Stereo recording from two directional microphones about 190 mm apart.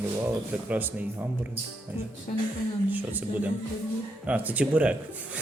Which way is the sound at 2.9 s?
10° right (ahead or behind).